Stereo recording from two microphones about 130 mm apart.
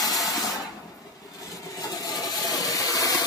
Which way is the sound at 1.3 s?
25° left (ahead or behind).